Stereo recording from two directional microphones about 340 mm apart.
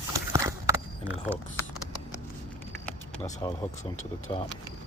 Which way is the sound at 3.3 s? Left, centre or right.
Centre.